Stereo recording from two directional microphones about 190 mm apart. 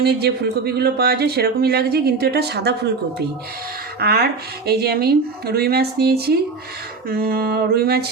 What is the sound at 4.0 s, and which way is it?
Speech, 55° right (ahead or behind).